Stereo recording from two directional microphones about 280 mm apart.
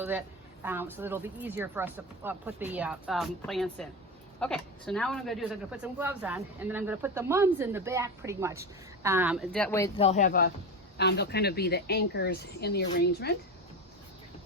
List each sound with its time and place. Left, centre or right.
0.0 s a man's voice: centre
10.0 s speech: left